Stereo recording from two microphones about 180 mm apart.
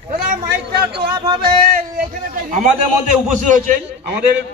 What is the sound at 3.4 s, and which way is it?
Speech, 45° right (ahead or behind).